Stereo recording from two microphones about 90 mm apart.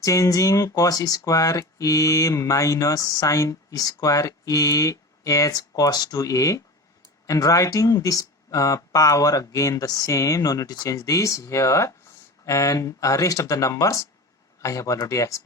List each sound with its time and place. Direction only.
0.0 s speech: 35° left (ahead or behind)